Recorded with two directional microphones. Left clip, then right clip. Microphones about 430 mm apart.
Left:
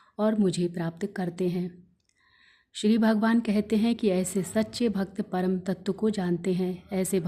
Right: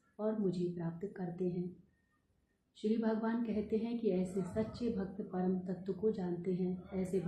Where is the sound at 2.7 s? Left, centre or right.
Left.